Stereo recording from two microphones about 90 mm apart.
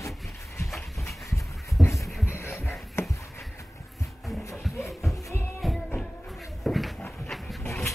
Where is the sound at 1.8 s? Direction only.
Centre (ahead or behind).